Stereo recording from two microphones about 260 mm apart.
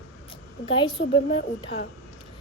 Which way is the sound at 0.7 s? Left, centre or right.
Centre.